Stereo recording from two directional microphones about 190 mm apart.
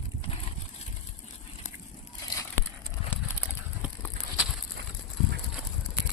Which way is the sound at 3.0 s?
30° left (ahead or behind).